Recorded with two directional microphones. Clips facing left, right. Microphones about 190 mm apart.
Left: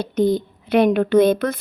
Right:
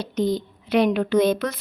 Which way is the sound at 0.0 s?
55° left (ahead or behind).